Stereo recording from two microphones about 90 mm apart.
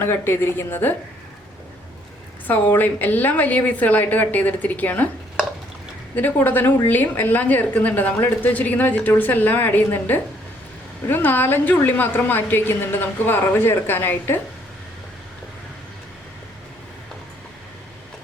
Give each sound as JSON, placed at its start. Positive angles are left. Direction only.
{"t": 0.0, "sound": "a woman's voice", "side_deg": 25}
{"t": 2.5, "sound": "a woman's voice", "side_deg": 20}
{"t": 6.1, "sound": "a woman's voice", "side_deg": 20}